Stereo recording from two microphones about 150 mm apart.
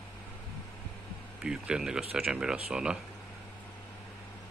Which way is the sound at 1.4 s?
5° right (ahead or behind).